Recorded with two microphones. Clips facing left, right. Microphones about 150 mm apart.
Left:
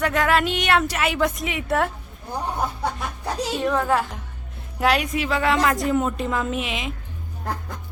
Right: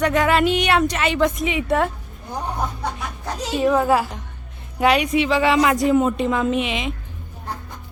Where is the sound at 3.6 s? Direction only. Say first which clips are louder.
Right 5 dB; 10° right (ahead or behind).